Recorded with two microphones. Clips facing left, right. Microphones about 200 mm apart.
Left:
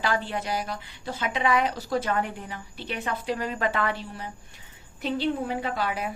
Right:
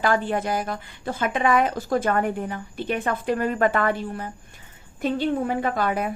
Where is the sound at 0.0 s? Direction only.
50° right (ahead or behind).